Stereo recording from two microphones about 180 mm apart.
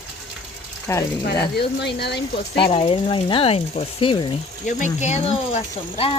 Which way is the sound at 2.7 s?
30° left (ahead or behind).